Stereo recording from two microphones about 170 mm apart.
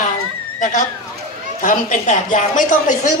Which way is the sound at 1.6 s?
50° left (ahead or behind).